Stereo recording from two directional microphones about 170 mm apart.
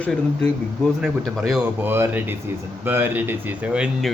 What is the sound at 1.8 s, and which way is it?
Speech, 10° right (ahead or behind).